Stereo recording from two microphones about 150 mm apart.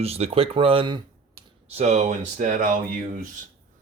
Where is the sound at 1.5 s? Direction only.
45° right (ahead or behind).